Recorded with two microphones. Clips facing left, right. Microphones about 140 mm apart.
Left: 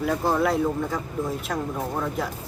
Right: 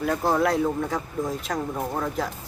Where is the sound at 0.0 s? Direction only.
Centre (ahead or behind).